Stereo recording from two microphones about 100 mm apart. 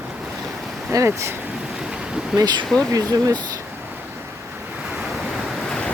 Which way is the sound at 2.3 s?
45° right (ahead or behind).